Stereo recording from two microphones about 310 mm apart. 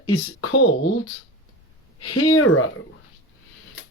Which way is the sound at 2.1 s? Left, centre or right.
Left.